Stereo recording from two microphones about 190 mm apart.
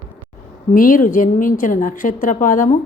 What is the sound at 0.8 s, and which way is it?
A woman's voice, 45° left (ahead or behind).